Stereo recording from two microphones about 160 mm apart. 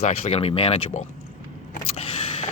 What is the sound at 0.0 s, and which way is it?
Speech, 40° left (ahead or behind).